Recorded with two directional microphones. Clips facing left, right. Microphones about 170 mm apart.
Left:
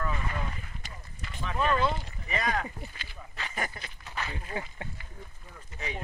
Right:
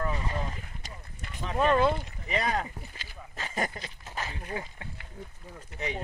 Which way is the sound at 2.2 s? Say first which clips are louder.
Right 1 dB; 30° right (ahead or behind).